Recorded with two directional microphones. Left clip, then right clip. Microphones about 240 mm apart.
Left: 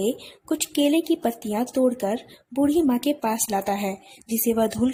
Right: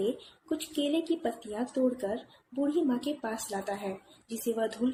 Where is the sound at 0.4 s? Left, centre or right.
Left.